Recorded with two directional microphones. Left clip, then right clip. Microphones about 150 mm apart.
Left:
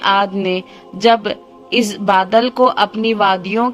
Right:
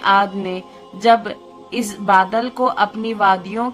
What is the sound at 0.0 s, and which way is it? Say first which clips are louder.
A woman's voice: left 1 dB; 35° left (ahead or behind).